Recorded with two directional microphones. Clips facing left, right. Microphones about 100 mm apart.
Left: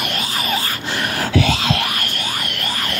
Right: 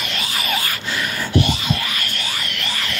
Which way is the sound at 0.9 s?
55° left (ahead or behind).